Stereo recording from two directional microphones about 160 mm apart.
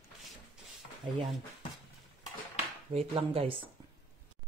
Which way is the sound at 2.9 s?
40° right (ahead or behind).